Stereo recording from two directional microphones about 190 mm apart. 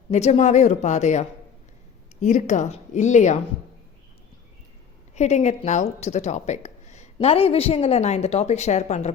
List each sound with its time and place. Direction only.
0.1 s speech: 35° left (ahead or behind)
2.2 s speech: 40° left (ahead or behind)
5.1 s speech: 35° left (ahead or behind)